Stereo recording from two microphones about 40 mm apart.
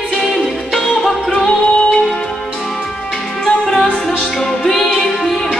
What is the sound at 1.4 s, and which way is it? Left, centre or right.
Music, centre.